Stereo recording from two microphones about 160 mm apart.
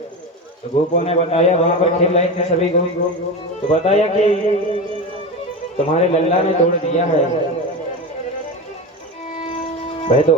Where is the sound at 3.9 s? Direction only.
40° left (ahead or behind).